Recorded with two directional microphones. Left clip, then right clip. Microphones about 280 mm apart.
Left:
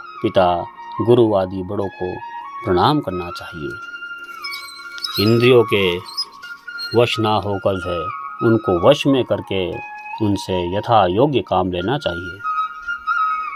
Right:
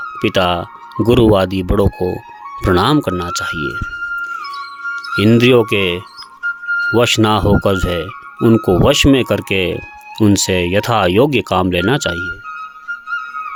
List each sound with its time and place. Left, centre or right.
0.2 s speech: right
5.1 s speech: right